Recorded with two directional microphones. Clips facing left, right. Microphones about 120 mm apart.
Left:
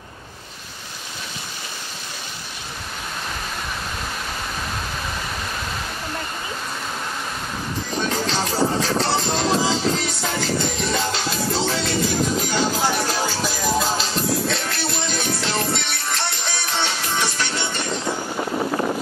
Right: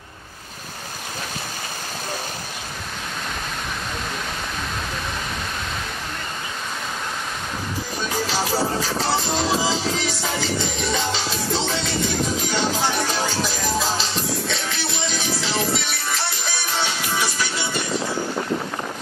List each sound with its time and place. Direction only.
8.3 s music: 5° right (ahead or behind)